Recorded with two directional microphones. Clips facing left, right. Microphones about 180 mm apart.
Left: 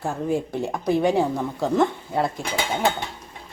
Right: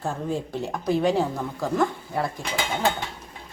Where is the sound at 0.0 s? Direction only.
15° left (ahead or behind).